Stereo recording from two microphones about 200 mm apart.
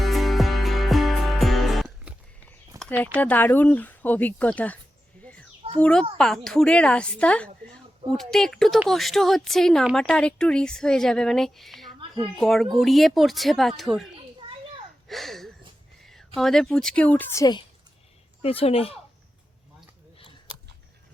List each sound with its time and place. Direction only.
0.0 s music: centre (ahead or behind)
3.2 s speech: 10° left (ahead or behind)
5.8 s a woman's voice: 5° left (ahead or behind)
15.0 s a sound: centre (ahead or behind)
16.0 s a woman's voice: centre (ahead or behind); by 18.9 s 30° left (ahead or behind)